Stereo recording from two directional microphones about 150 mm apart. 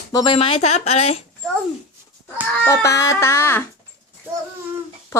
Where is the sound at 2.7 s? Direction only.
20° left (ahead or behind).